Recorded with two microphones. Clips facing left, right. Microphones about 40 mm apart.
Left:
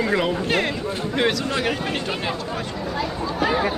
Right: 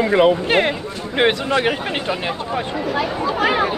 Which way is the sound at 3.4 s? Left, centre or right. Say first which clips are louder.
Right 3 dB; right.